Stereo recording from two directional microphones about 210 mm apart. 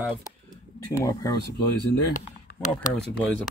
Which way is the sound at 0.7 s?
15° left (ahead or behind).